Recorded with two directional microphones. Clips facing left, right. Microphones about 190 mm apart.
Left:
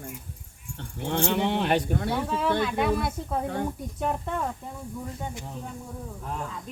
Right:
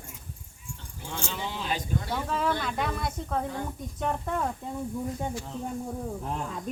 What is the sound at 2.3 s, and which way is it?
Speech, centre (ahead or behind).